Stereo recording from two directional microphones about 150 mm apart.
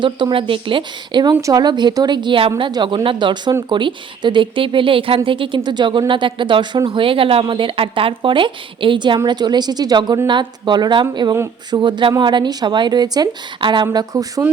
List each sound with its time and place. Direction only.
0.0 s a woman's voice: 30° right (ahead or behind)